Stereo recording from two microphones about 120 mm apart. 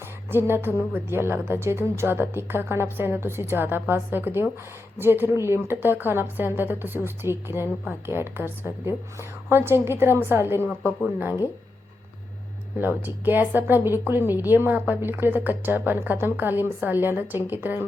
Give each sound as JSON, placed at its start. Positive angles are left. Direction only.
{"t": 0.3, "sound": "a woman's voice", "side_deg": -20}
{"t": 12.8, "sound": "a woman's voice", "side_deg": -15}